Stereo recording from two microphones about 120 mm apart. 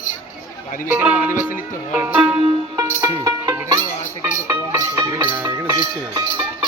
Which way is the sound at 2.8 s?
25° right (ahead or behind).